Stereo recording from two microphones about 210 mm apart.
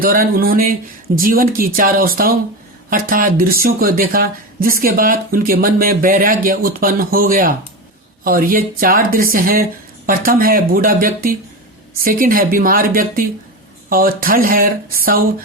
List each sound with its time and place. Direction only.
0.0 s speech: 45° right (ahead or behind)